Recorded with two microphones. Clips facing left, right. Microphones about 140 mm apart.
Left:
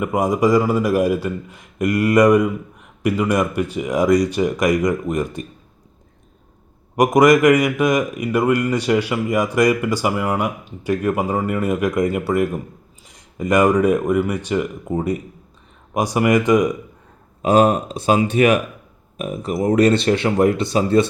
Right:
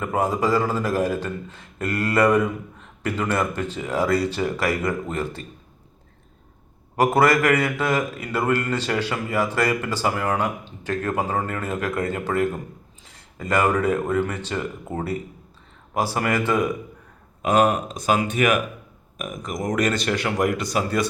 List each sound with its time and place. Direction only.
0.0 s a man's voice: 15° left (ahead or behind)
6.9 s a man's voice: 15° left (ahead or behind)
17.4 s speech: 35° left (ahead or behind)